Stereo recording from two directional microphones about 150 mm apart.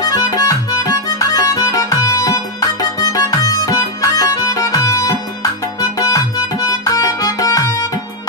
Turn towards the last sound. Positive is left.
turn(degrees=25)  # may be behind; listen again after turning